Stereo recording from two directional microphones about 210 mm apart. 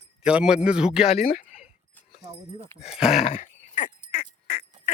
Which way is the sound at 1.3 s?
40° left (ahead or behind).